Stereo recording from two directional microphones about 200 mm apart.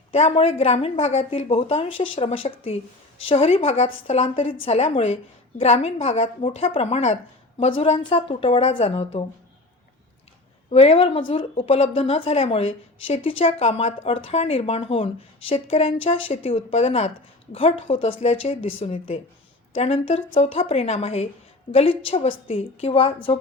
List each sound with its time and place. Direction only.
0.1 s a woman's voice: 30° left (ahead or behind)
10.7 s a woman's voice: 30° left (ahead or behind)